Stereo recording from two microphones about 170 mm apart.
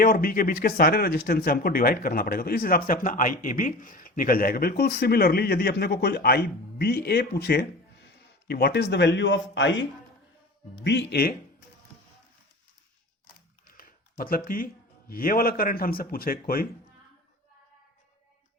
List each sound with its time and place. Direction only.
0.0 s speech: 60° left (ahead or behind); by 9.8 s 90° left
10.8 s speech: 90° left; by 11.3 s 65° left (ahead or behind)
13.7 s speech: 60° left (ahead or behind)